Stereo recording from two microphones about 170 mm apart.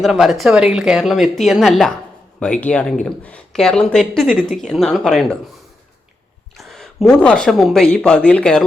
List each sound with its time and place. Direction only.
0.0 s speech: centre (ahead or behind)
6.6 s speech: centre (ahead or behind)